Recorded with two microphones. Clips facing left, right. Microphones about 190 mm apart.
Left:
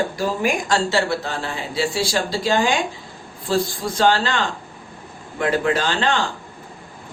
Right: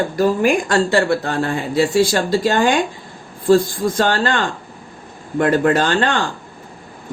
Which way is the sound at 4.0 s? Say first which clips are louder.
Left 1 dB; 50° right (ahead or behind).